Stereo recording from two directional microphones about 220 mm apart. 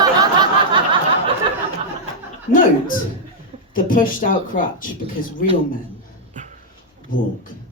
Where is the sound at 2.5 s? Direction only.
40° left (ahead or behind).